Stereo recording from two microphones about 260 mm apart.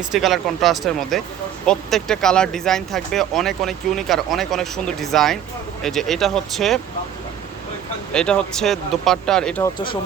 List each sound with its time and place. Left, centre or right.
0.1 s speech: centre
8.1 s speech: centre
9.7 s speech: centre